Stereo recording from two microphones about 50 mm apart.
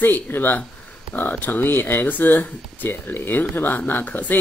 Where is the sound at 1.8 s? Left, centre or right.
Left.